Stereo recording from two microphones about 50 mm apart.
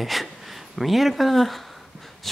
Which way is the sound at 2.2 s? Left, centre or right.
Centre.